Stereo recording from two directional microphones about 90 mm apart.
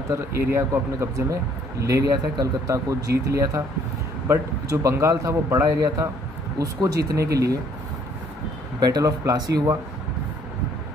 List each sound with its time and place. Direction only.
0.1 s speech: 30° right (ahead or behind)
8.7 s speech: 50° right (ahead or behind)